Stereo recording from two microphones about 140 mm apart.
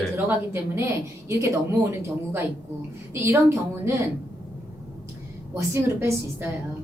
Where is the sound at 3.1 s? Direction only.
20° right (ahead or behind).